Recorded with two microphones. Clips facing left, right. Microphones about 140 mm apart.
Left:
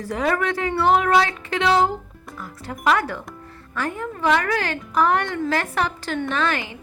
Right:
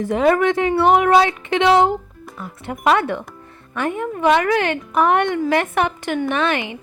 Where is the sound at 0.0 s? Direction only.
20° right (ahead or behind).